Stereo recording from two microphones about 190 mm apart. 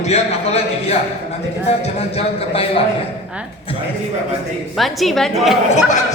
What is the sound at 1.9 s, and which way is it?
Speech, 30° left (ahead or behind).